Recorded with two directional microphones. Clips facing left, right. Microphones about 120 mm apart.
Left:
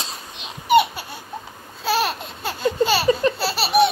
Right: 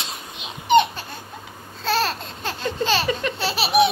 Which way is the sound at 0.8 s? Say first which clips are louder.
Even; 10° left (ahead or behind).